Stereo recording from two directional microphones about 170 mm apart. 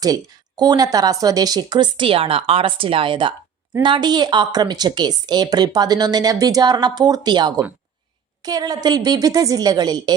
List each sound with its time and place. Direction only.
0.0 s a woman's voice: 20° right (ahead or behind)